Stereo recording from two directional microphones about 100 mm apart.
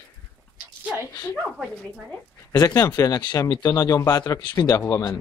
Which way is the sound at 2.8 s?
40° left (ahead or behind).